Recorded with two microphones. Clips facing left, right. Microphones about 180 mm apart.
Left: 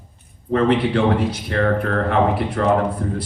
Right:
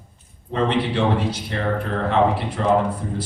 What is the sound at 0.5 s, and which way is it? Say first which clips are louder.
A man's voice: left 4 dB; 55° left (ahead or behind).